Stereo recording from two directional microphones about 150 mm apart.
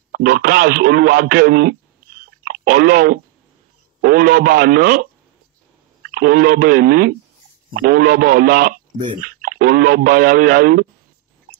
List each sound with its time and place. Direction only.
0.1 s a man's voice: 85° right
6.0 s a man's voice: 90° right; by 9.1 s 70° right (ahead or behind)
9.4 s a man's voice: 85° right